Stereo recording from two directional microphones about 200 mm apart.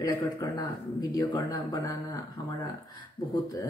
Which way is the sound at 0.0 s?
20° left (ahead or behind).